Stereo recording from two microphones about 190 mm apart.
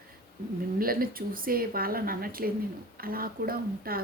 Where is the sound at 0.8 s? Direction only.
50° right (ahead or behind).